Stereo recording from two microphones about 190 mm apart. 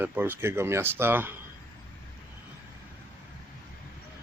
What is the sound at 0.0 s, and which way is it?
Speech, 10° right (ahead or behind).